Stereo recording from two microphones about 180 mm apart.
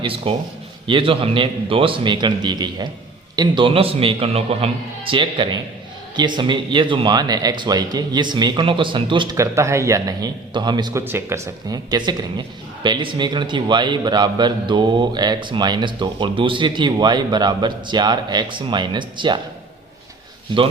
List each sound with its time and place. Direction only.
0.0 s a man's voice: 30° right (ahead or behind)